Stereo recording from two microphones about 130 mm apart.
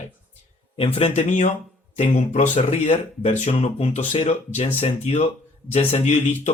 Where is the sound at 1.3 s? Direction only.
70° left (ahead or behind).